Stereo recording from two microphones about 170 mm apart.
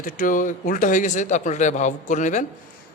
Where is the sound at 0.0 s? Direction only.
50° left (ahead or behind).